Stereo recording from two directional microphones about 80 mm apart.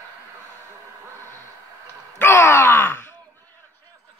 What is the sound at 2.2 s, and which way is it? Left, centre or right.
Groan, left.